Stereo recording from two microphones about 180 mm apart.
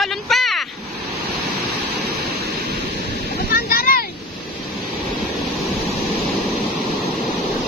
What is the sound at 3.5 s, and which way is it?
Boat, 55° left (ahead or behind).